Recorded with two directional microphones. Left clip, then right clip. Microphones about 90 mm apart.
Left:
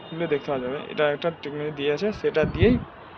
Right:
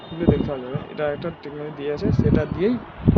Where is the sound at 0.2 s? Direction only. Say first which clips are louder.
Right 3 dB; 20° right (ahead or behind).